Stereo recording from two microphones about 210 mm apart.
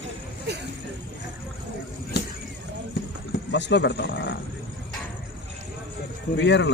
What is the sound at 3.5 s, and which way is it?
Speech, 55° left (ahead or behind).